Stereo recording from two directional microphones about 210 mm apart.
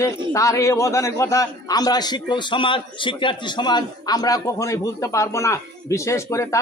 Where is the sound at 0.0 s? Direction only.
15° left (ahead or behind).